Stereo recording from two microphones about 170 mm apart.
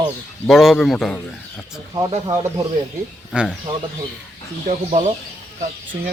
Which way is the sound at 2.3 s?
20° right (ahead or behind).